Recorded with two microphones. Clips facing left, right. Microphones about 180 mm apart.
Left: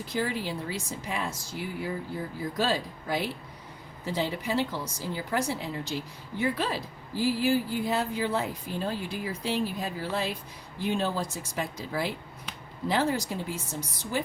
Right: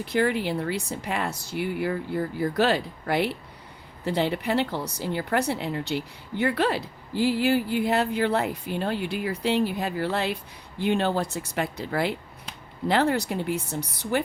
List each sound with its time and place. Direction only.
0.0 s a woman's voice: 65° right (ahead or behind)